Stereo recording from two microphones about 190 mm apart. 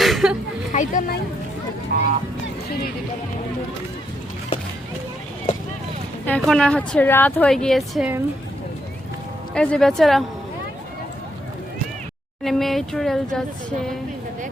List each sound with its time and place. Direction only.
0.0 s a sound: centre (ahead or behind)
0.7 s speech: 40° left (ahead or behind)
1.9 s speech: 55° right (ahead or behind)
6.2 s speech: 5° left (ahead or behind)
9.6 s speech: 5° left (ahead or behind)
12.4 s speech: centre (ahead or behind)